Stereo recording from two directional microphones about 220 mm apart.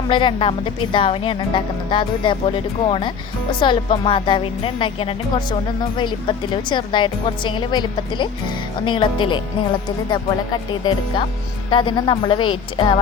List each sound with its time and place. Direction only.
0.1 s a woman's voice: 20° left (ahead or behind)